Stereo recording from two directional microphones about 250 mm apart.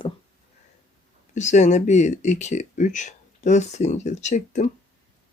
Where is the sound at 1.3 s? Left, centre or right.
Left.